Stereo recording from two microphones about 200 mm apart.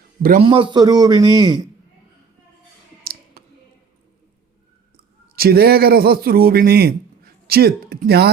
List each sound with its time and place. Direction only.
0.2 s a man's voice: 45° right (ahead or behind)
0.4 s speech: 25° right (ahead or behind)
3.0 s clicking: 50° right (ahead or behind)
5.4 s a man's voice: 50° right (ahead or behind)